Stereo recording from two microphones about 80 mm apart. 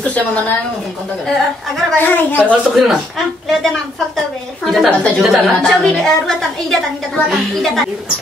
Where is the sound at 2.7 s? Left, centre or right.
Centre.